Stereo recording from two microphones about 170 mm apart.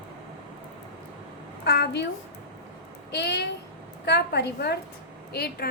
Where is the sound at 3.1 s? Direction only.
80° left.